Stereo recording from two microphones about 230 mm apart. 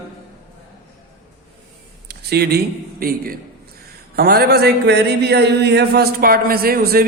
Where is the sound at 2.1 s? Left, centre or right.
Right.